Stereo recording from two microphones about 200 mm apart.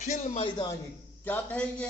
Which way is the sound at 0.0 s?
35° left (ahead or behind).